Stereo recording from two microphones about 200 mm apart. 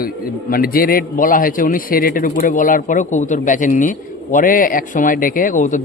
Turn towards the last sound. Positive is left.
turn(degrees=40)  # may be behind; listen again after turning